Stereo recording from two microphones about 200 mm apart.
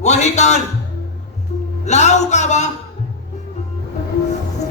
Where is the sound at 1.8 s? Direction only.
35° left (ahead or behind).